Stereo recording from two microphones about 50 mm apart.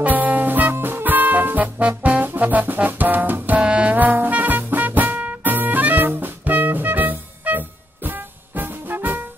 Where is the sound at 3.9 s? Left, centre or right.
Right.